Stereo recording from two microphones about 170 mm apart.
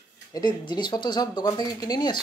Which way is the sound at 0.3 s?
25° left (ahead or behind).